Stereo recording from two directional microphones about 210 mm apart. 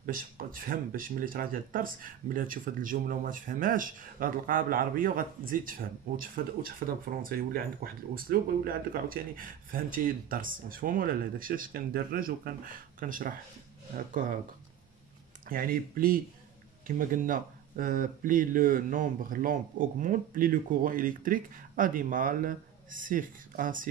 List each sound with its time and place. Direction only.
0.0 s speech: 40° right (ahead or behind)
15.4 s speech: 45° right (ahead or behind)